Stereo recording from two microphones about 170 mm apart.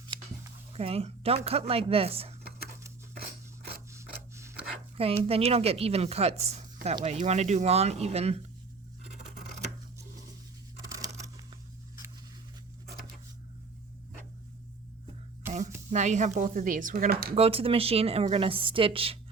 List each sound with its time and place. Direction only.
0.1 s a sound: 30° right (ahead or behind)
0.7 s a woman's voice: 35° right (ahead or behind)
3.9 s rub: 15° right (ahead or behind)
4.9 s a woman's voice: 35° right (ahead or behind)
10.8 s crumpling: 20° right (ahead or behind)
15.9 s speech: 45° right (ahead or behind); by 17.3 s 65° right (ahead or behind)
17.3 s a woman's voice: 35° right (ahead or behind)